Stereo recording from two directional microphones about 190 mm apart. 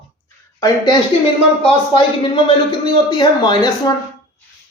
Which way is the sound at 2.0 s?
25° left (ahead or behind).